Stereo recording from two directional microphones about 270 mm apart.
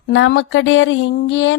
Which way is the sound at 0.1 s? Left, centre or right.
Left.